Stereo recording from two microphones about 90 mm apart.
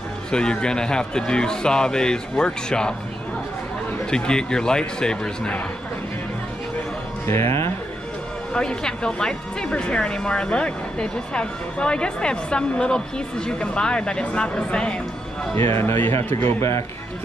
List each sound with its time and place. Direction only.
0.3 s speech: 10° left (ahead or behind)
4.1 s speech: 10° left (ahead or behind)
7.2 s speech: 30° left (ahead or behind)
8.5 s speech: 10° left (ahead or behind)
15.5 s speech: 25° left (ahead or behind)